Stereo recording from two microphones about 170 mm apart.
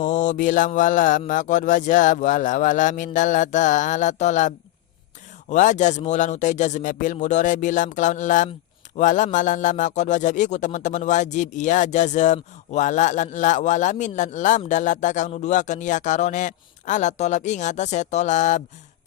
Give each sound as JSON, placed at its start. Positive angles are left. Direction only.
{"t": 0.0, "sound": "speech", "side_deg": 45}